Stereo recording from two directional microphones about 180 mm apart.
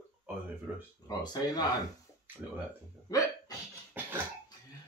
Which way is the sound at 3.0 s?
20° left (ahead or behind).